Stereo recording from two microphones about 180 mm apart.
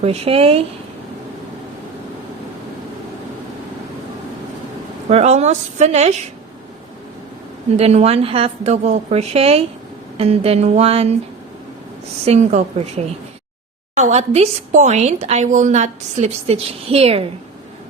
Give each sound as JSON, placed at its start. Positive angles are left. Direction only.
{"t": 0.0, "sound": "a woman's voice", "side_deg": -35}
{"t": 5.0, "sound": "a woman's voice", "side_deg": -40}
{"t": 7.8, "sound": "a woman's voice", "side_deg": -35}
{"t": 12.2, "sound": "a woman's voice", "side_deg": -35}